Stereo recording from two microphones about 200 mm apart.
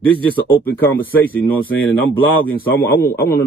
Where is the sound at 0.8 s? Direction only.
10° left (ahead or behind).